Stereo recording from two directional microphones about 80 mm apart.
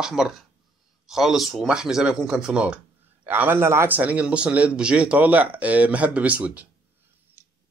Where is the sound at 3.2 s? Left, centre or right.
Right.